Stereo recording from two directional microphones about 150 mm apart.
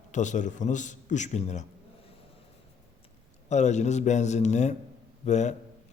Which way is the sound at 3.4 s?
50° left (ahead or behind).